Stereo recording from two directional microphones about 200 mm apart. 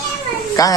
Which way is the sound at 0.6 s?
20° left (ahead or behind).